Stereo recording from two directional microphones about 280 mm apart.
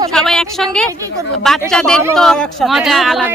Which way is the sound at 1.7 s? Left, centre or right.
Centre.